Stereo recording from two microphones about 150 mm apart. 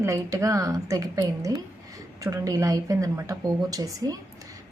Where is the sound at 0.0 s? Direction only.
20° right (ahead or behind).